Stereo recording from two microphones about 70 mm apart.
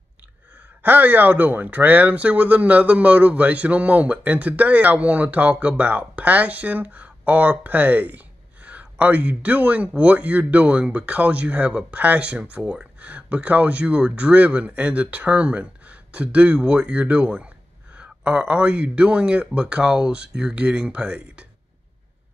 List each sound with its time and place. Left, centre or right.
0.8 s a man's voice: right